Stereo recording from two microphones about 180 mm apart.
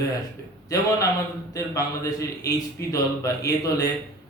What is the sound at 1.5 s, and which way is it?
A man's voice, 20° left (ahead or behind).